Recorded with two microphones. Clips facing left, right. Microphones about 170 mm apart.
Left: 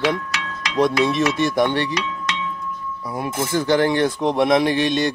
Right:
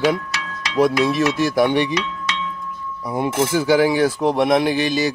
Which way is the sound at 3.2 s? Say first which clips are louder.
Right 6 dB; 90° right.